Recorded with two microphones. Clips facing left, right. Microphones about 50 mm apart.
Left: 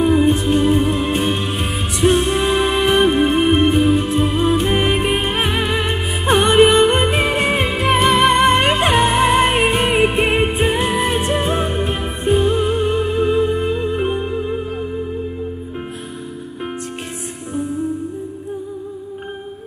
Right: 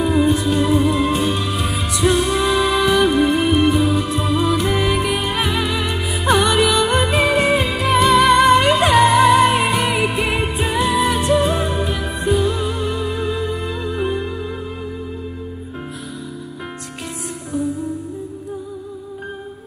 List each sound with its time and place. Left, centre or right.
0.0 s music: left
17.5 s music: left